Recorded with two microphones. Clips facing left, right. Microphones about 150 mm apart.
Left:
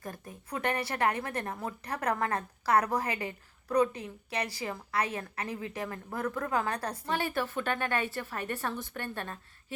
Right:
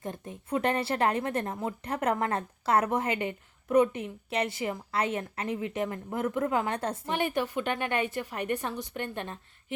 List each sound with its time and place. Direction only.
0.0 s speech: 25° right (ahead or behind)